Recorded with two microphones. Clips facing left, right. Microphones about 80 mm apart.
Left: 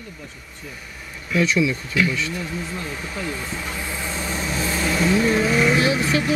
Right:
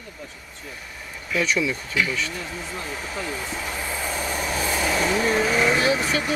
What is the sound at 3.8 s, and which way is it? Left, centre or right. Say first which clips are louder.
Vehicle: even; centre.